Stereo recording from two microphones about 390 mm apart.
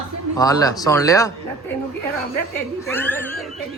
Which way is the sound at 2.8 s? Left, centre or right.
Centre.